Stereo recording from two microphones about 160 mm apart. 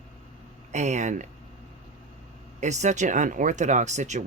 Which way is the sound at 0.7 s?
45° right (ahead or behind).